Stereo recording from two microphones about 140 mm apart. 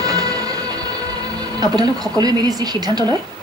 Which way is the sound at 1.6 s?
30° right (ahead or behind).